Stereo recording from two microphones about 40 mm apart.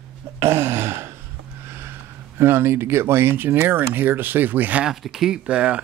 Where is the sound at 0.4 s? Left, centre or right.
Right.